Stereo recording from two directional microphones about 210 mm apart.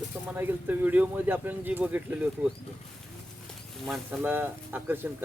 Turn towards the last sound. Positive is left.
turn(degrees=-10)  # may be behind; listen again after turning